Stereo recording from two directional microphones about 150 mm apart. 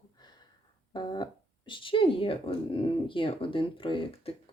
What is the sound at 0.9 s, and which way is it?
Speech, 30° left (ahead or behind).